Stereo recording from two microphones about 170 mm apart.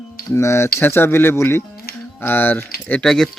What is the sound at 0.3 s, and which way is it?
Speech, 15° left (ahead or behind).